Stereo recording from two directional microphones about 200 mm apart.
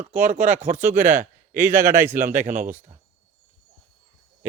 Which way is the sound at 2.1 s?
40° right (ahead or behind).